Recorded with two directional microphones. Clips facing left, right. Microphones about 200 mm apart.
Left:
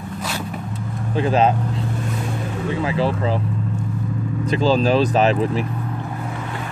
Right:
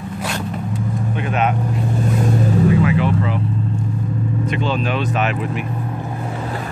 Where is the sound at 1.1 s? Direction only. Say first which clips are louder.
Left 5 dB; 30° left (ahead or behind).